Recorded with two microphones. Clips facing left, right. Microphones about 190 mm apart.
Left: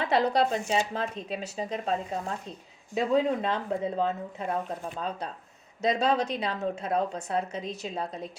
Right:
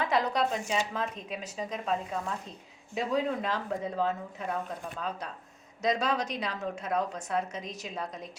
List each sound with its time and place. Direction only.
0.0 s speech: 30° left (ahead or behind)